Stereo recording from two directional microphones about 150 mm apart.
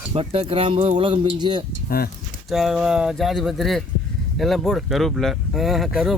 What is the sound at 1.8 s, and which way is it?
Speech, 85° left.